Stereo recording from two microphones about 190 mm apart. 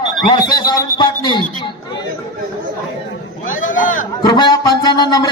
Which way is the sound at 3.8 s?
45° left (ahead or behind).